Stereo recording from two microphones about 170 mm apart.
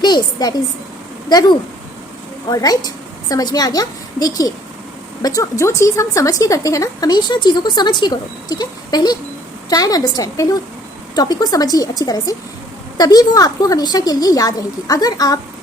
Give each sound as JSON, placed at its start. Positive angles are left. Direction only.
{"t": 0.0, "sound": "a woman's voice", "side_deg": 25}